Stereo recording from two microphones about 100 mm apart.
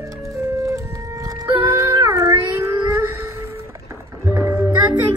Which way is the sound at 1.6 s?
35° right (ahead or behind).